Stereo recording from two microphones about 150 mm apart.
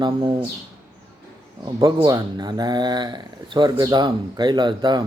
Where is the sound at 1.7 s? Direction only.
30° right (ahead or behind).